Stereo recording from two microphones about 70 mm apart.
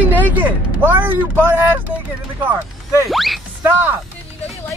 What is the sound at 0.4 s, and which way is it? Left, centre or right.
Speech, right.